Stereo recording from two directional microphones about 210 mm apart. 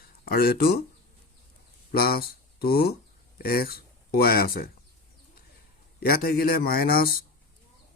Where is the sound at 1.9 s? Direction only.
45° left (ahead or behind).